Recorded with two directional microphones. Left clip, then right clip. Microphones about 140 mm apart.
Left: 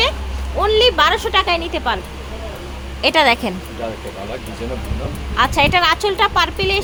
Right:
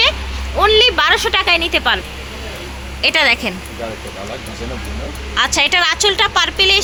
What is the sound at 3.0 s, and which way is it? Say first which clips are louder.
Speech: even; 25° left (ahead or behind).